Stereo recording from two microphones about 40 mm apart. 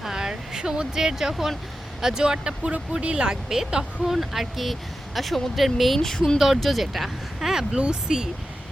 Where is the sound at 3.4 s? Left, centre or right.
Centre.